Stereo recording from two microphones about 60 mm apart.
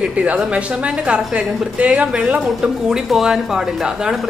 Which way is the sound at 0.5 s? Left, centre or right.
Centre.